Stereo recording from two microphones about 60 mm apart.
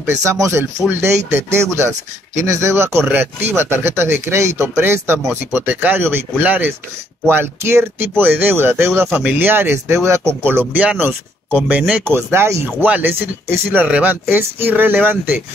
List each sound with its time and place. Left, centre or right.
0.0 s speech: right
7.2 s speech: right
9.1 s speech: right
10.0 s speech: right
10.4 s speech: right
11.9 s speech: right
12.8 s speech: right
13.1 s speech: right
13.8 s speech: centre
14.3 s speech: right